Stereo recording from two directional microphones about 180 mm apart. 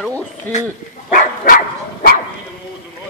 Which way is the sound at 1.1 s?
45° left (ahead or behind).